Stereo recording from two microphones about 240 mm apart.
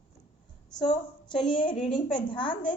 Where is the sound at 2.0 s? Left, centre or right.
Centre.